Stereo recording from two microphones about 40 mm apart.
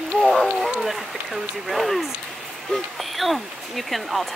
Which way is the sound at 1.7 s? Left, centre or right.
Centre.